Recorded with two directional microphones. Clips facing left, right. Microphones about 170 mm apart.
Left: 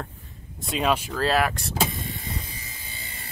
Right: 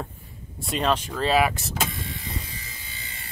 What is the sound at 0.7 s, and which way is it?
Speech, 5° left (ahead or behind).